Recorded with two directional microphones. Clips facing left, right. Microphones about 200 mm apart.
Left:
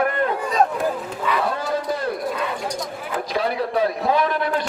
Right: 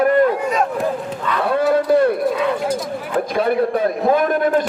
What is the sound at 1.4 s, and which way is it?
Speech, 60° right (ahead or behind).